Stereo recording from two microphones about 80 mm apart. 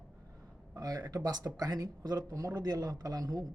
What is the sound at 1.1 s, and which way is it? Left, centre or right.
Speech, right.